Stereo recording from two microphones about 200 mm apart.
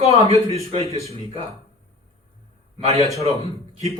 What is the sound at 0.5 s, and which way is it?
Speech, 30° right (ahead or behind).